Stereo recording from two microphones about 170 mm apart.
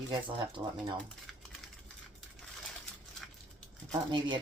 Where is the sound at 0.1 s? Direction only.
25° right (ahead or behind).